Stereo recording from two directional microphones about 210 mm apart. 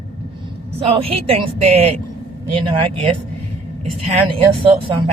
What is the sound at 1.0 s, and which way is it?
Speech, 25° right (ahead or behind).